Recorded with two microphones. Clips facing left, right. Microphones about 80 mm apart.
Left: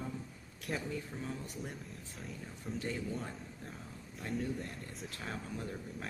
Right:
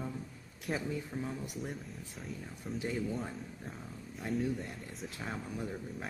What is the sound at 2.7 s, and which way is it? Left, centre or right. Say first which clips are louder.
Speech: right 3 dB; centre.